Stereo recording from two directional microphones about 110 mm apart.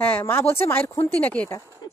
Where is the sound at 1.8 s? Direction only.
40° left (ahead or behind).